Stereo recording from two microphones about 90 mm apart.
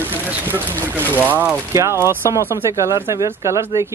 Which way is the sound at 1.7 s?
30° right (ahead or behind).